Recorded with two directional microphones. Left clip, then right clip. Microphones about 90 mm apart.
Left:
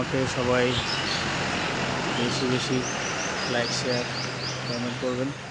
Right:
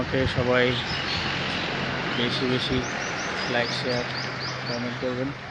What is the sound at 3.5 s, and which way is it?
Speech, centre (ahead or behind).